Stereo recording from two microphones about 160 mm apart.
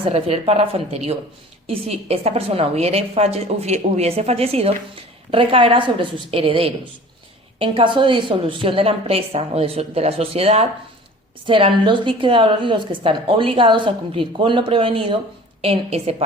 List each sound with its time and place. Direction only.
0.0 s a woman's voice: 40° right (ahead or behind)